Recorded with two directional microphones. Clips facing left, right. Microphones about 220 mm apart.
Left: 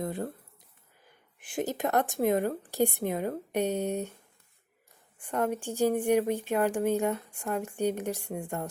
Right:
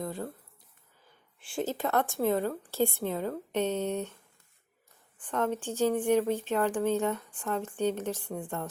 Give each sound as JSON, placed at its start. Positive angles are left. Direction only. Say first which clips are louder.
{"t": 1.4, "sound": "speech", "louder": "left 1 dB", "side_deg": 15}
{"t": 5.2, "sound": "speech", "louder": "left 1 dB", "side_deg": 10}